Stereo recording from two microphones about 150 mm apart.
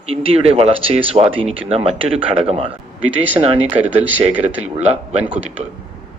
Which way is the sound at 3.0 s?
10° right (ahead or behind).